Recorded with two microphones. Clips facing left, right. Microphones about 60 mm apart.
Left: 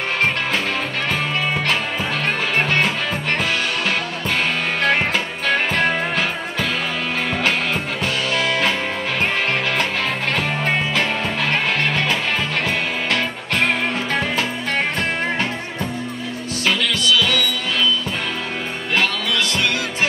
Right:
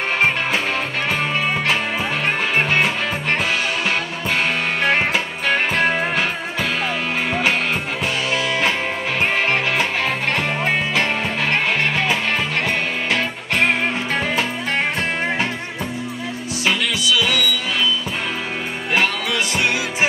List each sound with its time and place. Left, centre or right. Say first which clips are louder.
2.5 s music: even; centre
4.8 s music: even; centre
8.3 s music: left 1 dB; centre
10.3 s music: even; centre
16.6 s music: even; centre
18.9 s music: even; centre